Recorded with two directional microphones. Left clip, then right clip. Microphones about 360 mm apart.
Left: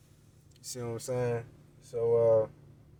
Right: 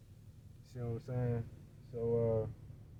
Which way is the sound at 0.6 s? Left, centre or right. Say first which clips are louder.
Left 7 dB; left.